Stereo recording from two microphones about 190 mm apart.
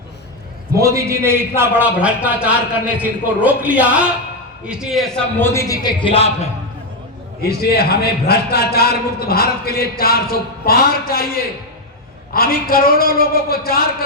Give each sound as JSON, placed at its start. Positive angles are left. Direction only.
{"t": 0.8, "sound": "a man's voice", "side_deg": -15}
{"t": 7.4, "sound": "a man's voice", "side_deg": 55}